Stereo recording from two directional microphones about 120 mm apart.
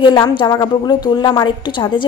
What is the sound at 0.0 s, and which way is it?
A woman's voice, 40° left (ahead or behind).